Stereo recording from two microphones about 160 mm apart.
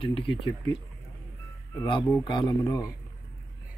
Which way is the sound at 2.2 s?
30° left (ahead or behind).